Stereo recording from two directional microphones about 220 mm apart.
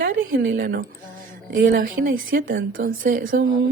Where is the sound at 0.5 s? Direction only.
40° right (ahead or behind).